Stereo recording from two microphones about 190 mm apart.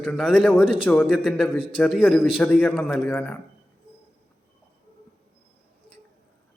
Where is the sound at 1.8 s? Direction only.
5° left (ahead or behind).